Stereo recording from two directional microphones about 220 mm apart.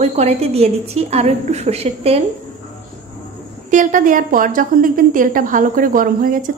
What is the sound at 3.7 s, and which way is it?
A woman's voice, 35° right (ahead or behind).